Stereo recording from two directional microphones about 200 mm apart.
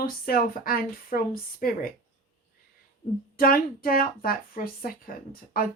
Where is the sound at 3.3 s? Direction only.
45° left (ahead or behind).